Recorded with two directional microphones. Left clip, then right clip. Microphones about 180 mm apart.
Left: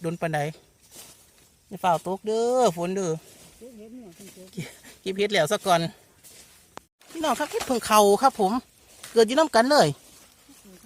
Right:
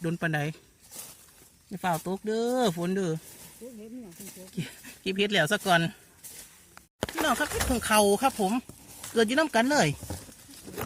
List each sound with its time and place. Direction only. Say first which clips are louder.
0.0 s speech: left 3 dB; 25° left (ahead or behind)
1.7 s speech: left 6 dB; 30° left (ahead or behind)
4.5 s speech: even; 30° left (ahead or behind)
7.3 s speech: left 2 dB; 20° left (ahead or behind)
7.7 s speech: left 6 dB; 35° left (ahead or behind)